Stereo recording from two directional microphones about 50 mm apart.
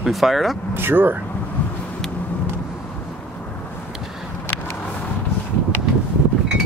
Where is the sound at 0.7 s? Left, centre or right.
Right.